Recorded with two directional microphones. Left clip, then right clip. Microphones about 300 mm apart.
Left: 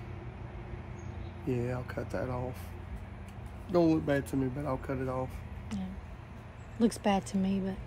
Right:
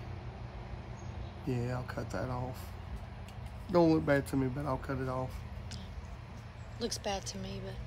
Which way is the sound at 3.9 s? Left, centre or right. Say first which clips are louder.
Right 1 dB; right.